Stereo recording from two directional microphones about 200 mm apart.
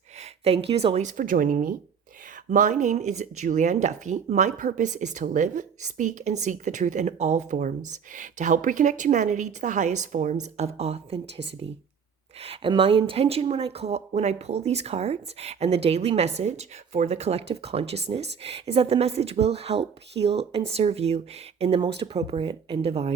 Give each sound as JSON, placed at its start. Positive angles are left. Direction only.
{"t": 0.2, "sound": "speech", "side_deg": -30}
{"t": 12.4, "sound": "speech", "side_deg": -25}